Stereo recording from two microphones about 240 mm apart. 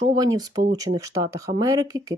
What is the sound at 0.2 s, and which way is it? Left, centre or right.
Speech, centre.